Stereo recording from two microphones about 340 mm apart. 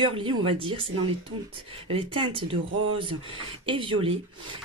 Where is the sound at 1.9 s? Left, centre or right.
Centre.